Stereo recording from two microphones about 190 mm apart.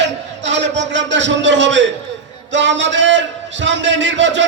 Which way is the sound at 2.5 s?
70° right (ahead or behind).